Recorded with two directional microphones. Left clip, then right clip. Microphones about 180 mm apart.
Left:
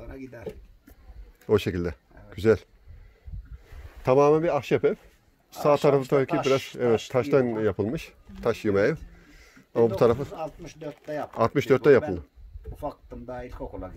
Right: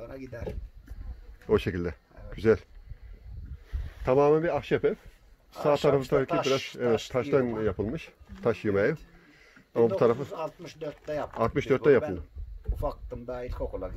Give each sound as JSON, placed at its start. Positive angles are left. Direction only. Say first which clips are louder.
{"t": 0.0, "sound": "speech", "louder": "even", "side_deg": 0}
{"t": 1.5, "sound": "speech", "louder": "left 2 dB", "side_deg": 20}
{"t": 4.0, "sound": "speech", "louder": "left 3 dB", "side_deg": 25}
{"t": 10.3, "sound": "speech", "louder": "even", "side_deg": 0}
{"t": 11.3, "sound": "speech", "louder": "left 5 dB", "side_deg": 30}
{"t": 12.7, "sound": "speech", "louder": "right 1 dB", "side_deg": 0}